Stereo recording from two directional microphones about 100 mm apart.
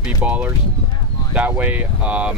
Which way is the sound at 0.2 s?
15° right (ahead or behind).